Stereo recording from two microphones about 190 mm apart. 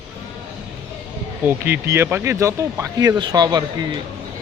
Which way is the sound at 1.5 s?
10° right (ahead or behind).